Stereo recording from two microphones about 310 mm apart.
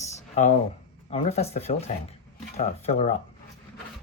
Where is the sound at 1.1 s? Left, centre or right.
Centre.